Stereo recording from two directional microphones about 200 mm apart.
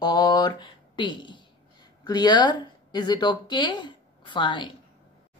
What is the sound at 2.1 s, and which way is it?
A woman's voice, 20° left (ahead or behind).